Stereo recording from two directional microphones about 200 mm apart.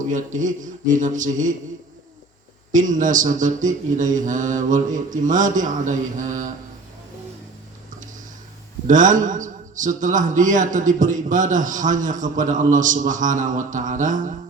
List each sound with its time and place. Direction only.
0.1 s a man's voice: 40° right (ahead or behind)
2.7 s a man's voice: 40° right (ahead or behind)
8.9 s a man's voice: 40° right (ahead or behind)